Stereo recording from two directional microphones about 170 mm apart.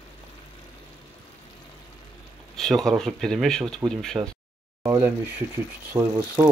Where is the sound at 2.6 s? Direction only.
Centre (ahead or behind).